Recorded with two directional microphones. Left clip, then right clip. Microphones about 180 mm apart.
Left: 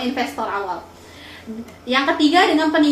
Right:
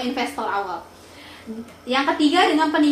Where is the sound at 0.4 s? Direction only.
20° right (ahead or behind).